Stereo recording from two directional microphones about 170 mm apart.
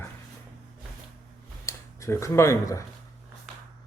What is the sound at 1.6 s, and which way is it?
Speech, 15° left (ahead or behind).